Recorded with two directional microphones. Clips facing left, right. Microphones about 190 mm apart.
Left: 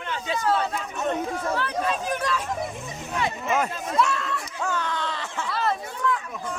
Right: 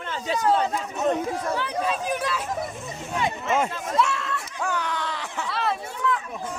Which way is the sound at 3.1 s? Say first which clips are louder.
Right 1 dB; 20° right (ahead or behind).